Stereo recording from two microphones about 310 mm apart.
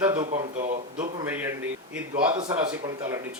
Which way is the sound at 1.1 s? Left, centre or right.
Centre.